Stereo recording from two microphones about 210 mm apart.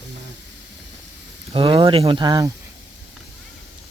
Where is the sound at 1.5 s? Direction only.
25° right (ahead or behind).